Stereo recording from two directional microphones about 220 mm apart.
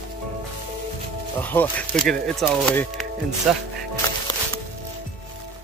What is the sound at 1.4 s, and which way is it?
Speech, 5° left (ahead or behind).